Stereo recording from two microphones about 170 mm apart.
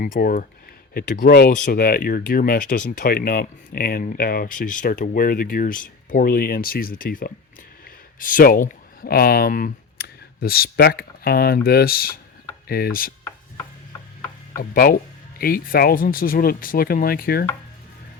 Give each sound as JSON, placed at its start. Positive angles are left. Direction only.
{"t": 0.0, "sound": "speech", "side_deg": 55}
{"t": 14.6, "sound": "speech", "side_deg": 60}